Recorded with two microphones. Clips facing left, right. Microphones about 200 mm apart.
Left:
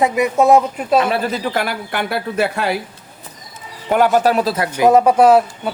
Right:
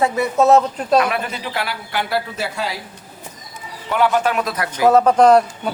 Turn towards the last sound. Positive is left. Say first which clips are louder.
# left 1 dB
turn(degrees=5)  # may be behind; listen again after turning